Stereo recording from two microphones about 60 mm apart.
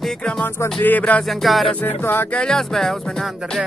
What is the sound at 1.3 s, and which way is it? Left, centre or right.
Music, centre.